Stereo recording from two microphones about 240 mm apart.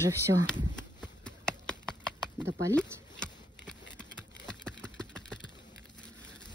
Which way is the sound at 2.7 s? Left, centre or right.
Centre.